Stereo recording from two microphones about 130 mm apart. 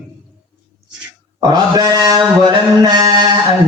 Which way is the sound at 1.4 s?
30° right (ahead or behind).